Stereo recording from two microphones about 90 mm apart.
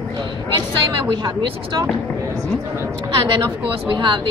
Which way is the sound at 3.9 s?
60° right (ahead or behind).